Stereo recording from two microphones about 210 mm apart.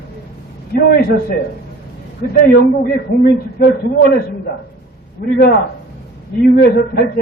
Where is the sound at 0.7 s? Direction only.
45° left (ahead or behind).